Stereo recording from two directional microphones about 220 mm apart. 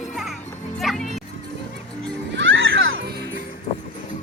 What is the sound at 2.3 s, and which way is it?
Children playing, 55° right (ahead or behind).